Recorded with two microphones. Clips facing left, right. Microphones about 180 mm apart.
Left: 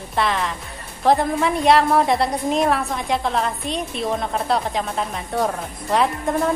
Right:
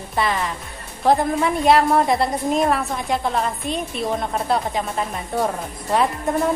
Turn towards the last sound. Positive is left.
turn(degrees=0)  # may be behind; listen again after turning